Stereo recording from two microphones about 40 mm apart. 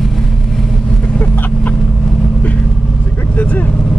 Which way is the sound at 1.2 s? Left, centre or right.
Left.